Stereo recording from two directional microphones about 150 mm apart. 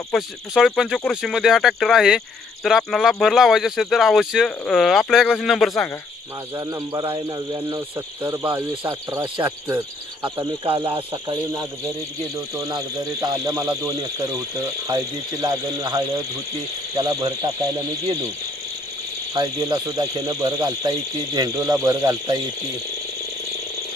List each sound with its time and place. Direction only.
0.1 s speech: centre (ahead or behind)
6.6 s speech: 25° right (ahead or behind)
10.4 s cricket: 35° right (ahead or behind)
12.5 s speech: 20° right (ahead or behind)
19.3 s speech: 25° right (ahead or behind)